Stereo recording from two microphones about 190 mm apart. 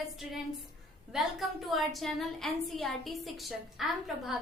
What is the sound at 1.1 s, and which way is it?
A woman's voice, centre (ahead or behind).